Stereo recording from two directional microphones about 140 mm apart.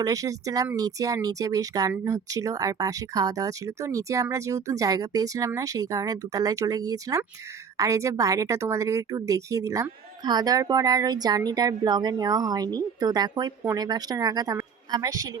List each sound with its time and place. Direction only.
0.0 s a woman's voice: 25° right (ahead or behind)